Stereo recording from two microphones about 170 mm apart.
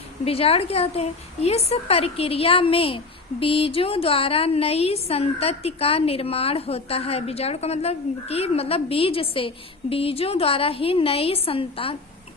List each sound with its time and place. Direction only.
0.3 s a woman's voice: 35° left (ahead or behind)